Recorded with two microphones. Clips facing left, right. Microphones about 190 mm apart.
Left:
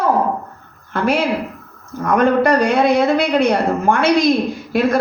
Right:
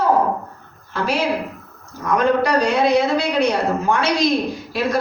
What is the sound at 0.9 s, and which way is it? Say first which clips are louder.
A man's voice: left 3 dB; 55° left (ahead or behind).